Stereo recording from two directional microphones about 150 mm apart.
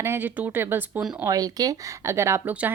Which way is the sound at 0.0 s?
15° right (ahead or behind).